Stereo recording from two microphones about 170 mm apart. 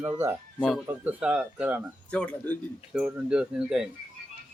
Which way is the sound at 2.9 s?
5° right (ahead or behind).